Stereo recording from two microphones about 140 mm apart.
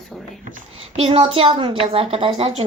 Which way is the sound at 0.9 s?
40° right (ahead or behind).